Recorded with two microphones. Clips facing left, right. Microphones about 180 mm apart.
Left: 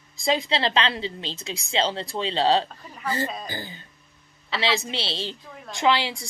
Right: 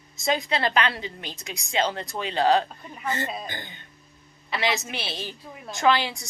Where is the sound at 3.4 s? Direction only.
35° left (ahead or behind).